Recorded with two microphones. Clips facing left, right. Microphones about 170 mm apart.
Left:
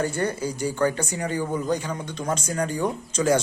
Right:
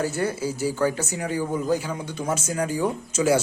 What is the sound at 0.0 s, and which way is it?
Speech, 5° right (ahead or behind).